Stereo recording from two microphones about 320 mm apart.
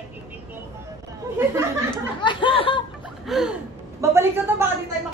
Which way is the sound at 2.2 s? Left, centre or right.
Centre.